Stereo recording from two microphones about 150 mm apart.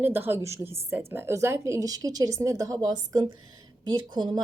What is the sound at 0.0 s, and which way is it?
A woman's voice, 15° right (ahead or behind).